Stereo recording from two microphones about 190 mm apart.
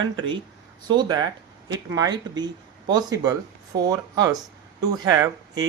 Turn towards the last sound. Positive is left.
turn(degrees=-20)  # may be behind; listen again after turning